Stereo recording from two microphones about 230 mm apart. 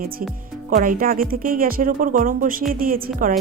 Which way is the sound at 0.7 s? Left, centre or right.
Right.